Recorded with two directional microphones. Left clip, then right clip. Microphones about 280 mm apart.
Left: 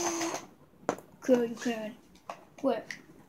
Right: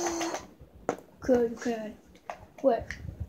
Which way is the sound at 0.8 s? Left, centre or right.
Centre.